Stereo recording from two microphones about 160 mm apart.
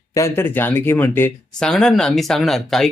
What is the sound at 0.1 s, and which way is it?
Speech, 15° left (ahead or behind).